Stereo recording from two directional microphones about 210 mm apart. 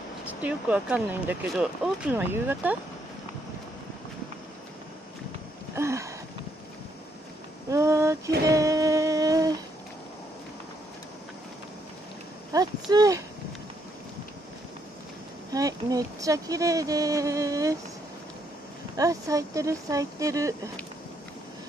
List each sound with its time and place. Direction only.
0.4 s speech: 5° right (ahead or behind)
5.8 s sniff: 15° right (ahead or behind)
7.7 s a sound: 15° right (ahead or behind)
8.5 s humming: 15° right (ahead or behind)
12.9 s speech: 15° right (ahead or behind)
15.5 s speech: 15° right (ahead or behind)
18.9 s speech: 15° right (ahead or behind)